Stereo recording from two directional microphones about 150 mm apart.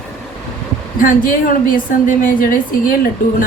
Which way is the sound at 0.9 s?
65° left (ahead or behind).